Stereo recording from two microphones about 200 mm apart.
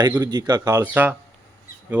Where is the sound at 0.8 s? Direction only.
10° right (ahead or behind).